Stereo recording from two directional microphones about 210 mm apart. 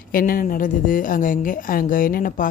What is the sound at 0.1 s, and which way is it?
A woman's voice, 40° left (ahead or behind).